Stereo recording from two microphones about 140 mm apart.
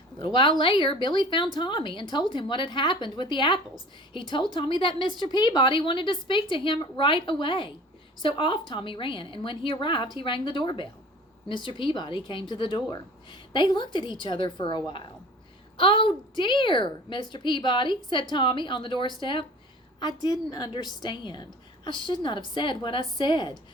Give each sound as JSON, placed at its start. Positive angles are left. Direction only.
{"t": 0.6, "sound": "a woman's voice", "side_deg": 35}